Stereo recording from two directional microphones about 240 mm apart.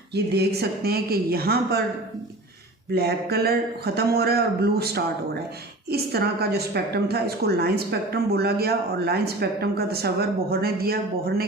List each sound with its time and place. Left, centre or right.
0.1 s a woman's voice: right
2.9 s a woman's voice: right